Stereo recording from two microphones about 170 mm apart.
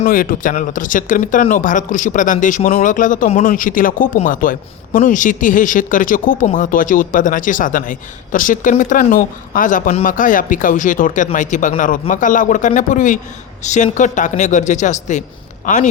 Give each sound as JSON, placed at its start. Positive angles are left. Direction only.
{"t": 0.0, "sound": "speech", "side_deg": 55}